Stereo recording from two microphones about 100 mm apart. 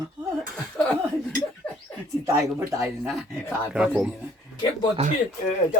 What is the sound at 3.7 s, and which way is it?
Speech, 10° right (ahead or behind).